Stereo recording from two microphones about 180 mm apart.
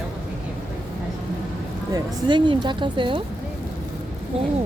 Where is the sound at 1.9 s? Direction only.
25° right (ahead or behind).